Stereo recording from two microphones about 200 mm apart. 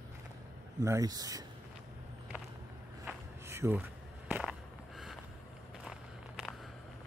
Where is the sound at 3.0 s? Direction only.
15° right (ahead or behind).